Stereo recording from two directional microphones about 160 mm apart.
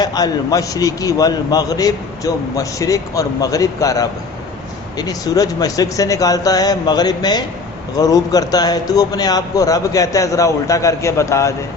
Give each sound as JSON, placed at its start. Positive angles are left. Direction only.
{"t": 0.0, "sound": "a man's voice", "side_deg": 25}